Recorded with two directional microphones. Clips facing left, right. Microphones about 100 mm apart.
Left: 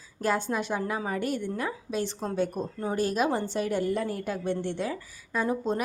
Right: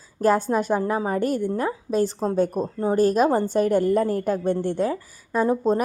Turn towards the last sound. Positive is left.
turn(degrees=-40)  # may be behind; listen again after turning